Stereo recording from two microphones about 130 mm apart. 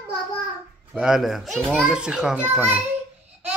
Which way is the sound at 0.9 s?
5° right (ahead or behind).